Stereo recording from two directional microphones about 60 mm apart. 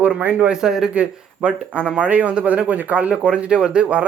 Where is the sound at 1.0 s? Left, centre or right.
Right.